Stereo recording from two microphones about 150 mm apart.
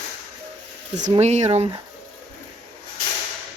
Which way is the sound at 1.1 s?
50° right (ahead or behind).